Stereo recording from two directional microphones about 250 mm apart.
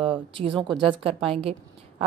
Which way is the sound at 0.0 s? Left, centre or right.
Right.